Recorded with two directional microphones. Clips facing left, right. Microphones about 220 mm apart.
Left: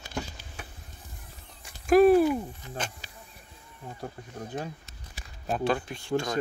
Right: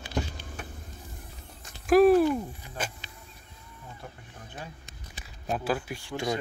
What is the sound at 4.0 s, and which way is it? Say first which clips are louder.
Speech: left 8 dB; 40° left (ahead or behind).